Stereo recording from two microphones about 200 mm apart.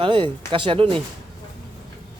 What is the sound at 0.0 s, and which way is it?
Speech, 25° right (ahead or behind).